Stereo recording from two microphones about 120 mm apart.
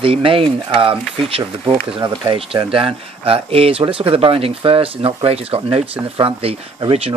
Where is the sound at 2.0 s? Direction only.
35° right (ahead or behind).